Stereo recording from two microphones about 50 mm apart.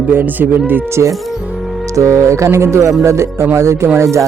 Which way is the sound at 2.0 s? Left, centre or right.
Right.